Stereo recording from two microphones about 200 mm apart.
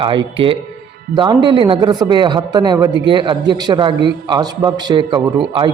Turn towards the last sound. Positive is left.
turn(degrees=-25)  # may be behind; listen again after turning